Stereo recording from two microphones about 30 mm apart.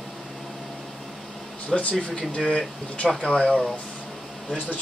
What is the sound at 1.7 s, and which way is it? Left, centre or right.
Speech, centre.